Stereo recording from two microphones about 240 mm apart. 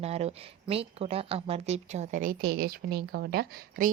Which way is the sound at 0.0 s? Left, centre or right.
Right.